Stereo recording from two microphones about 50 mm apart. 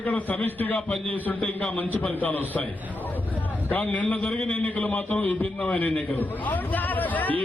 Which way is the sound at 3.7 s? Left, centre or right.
Left.